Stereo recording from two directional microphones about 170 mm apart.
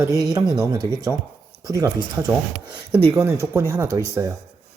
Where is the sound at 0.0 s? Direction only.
20° right (ahead or behind).